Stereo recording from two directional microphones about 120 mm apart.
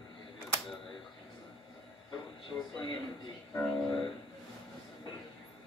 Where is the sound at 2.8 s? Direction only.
45° left (ahead or behind).